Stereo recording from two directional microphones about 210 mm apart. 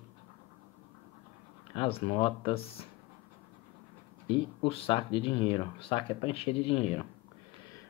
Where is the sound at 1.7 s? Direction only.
25° left (ahead or behind).